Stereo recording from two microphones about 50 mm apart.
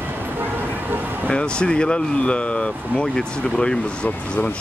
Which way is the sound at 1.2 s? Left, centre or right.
Centre.